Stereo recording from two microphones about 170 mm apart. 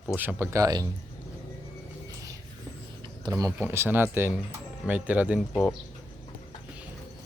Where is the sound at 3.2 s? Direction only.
20° right (ahead or behind).